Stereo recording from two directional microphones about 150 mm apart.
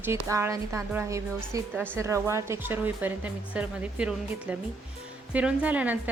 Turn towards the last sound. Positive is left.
turn(degrees=-10)  # may be behind; listen again after turning